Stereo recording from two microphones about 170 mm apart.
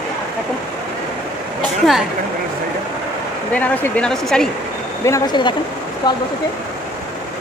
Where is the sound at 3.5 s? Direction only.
10° left (ahead or behind).